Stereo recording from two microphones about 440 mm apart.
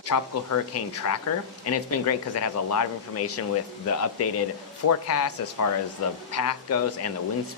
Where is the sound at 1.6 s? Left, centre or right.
Left.